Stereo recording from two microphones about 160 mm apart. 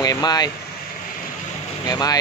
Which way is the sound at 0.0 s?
25° left (ahead or behind).